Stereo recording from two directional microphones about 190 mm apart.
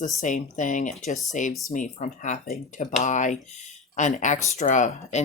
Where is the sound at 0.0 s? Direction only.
40° left (ahead or behind).